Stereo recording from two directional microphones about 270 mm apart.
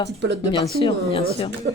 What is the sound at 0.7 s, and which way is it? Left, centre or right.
Speech, left.